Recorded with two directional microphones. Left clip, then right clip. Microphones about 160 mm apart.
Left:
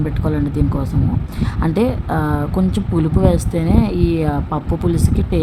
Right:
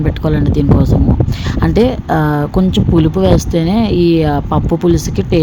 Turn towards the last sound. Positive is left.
turn(degrees=-20)  # may be behind; listen again after turning